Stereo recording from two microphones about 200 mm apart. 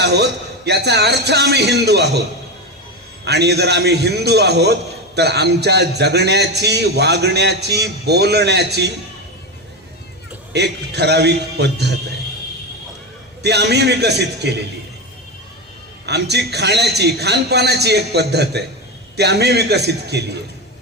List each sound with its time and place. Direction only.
0.0 s a man's voice: 55° right (ahead or behind)
3.2 s a man's voice: 55° right (ahead or behind)
10.5 s a man's voice: 55° right (ahead or behind)
13.4 s a man's voice: 55° right (ahead or behind)
16.0 s a man's voice: 55° right (ahead or behind)